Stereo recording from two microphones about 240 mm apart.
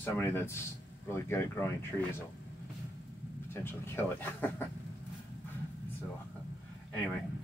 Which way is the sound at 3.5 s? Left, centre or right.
Centre.